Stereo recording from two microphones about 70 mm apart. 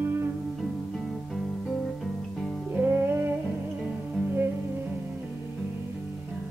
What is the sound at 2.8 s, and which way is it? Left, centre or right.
Music, right.